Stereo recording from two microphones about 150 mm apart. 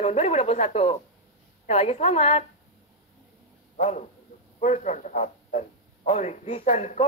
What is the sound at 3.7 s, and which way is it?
Speech, 45° left (ahead or behind).